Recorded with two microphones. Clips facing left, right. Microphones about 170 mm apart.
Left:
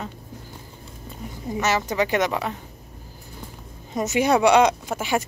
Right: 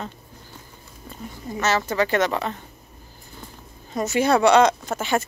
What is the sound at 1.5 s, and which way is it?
Speech, 15° left (ahead or behind).